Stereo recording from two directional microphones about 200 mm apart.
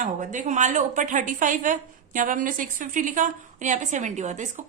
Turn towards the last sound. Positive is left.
turn(degrees=-35)  # may be behind; listen again after turning